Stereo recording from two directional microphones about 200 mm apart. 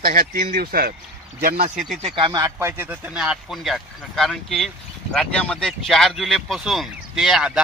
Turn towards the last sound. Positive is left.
turn(degrees=-5)  # may be behind; listen again after turning